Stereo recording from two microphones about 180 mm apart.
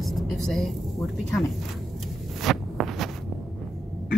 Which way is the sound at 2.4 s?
Centre (ahead or behind).